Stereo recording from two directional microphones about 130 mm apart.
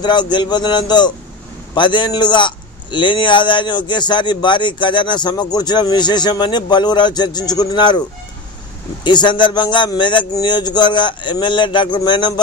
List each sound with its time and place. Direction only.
0.0 s a man's voice: 35° left (ahead or behind)
9.0 s a man's voice: 35° left (ahead or behind)